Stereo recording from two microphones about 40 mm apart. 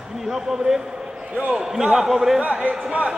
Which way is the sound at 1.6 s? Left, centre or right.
Centre.